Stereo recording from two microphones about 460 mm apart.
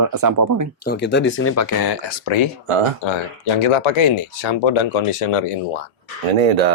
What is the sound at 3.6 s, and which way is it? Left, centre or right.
Speech, left.